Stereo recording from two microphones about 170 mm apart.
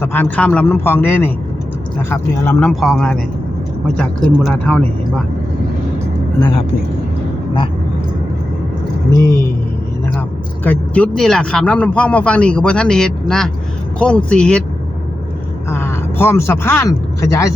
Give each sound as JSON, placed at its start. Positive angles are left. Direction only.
{"t": 0.0, "sound": "speech", "side_deg": 10}
{"t": 4.6, "sound": "speech", "side_deg": 10}
{"t": 9.0, "sound": "speech", "side_deg": 20}
{"t": 15.7, "sound": "speech", "side_deg": 15}